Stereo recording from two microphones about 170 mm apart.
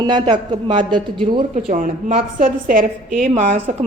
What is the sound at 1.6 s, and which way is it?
A woman's voice, 50° right (ahead or behind).